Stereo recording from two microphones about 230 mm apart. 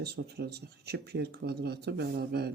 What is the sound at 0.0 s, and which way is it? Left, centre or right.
Speech, right.